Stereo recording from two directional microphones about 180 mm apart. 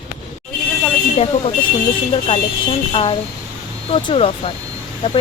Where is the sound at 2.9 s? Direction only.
30° left (ahead or behind).